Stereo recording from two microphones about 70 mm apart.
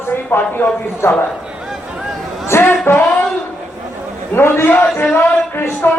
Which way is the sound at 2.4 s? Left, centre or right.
Left.